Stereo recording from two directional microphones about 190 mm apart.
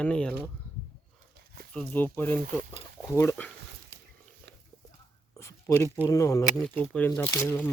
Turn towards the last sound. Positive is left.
turn(degrees=10)  # may be behind; listen again after turning